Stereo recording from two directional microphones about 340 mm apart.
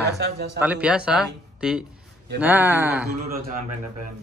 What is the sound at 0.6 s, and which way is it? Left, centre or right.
Speech, centre.